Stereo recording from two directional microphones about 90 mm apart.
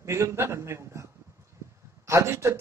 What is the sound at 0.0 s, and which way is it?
A man's voice, 30° right (ahead or behind).